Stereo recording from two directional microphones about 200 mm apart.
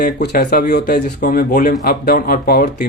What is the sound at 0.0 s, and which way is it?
Speech, 50° left (ahead or behind).